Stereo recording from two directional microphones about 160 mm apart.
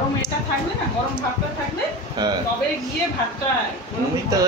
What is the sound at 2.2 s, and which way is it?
Speech, 25° right (ahead or behind).